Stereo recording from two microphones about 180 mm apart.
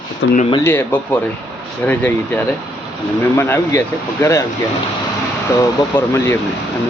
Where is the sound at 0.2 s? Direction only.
90° left.